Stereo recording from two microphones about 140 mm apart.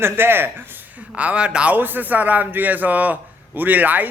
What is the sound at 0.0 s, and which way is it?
Speech, 15° right (ahead or behind).